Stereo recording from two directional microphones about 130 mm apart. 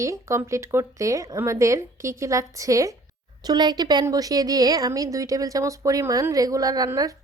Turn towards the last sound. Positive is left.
turn(degrees=-25)  # may be behind; listen again after turning